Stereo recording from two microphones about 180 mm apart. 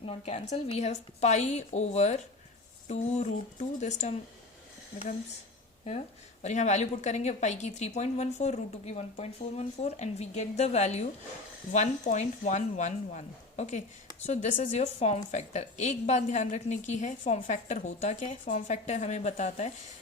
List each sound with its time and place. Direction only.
0.0 s a woman's voice: 30° left (ahead or behind)
6.4 s a woman's voice: 40° left (ahead or behind)